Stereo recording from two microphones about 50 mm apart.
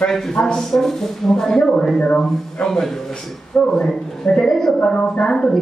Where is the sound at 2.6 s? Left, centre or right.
Centre.